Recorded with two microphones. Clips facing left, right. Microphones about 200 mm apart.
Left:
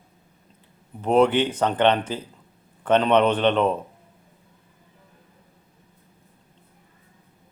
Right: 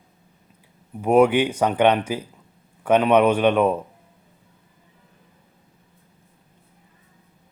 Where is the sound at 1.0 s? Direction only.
10° right (ahead or behind).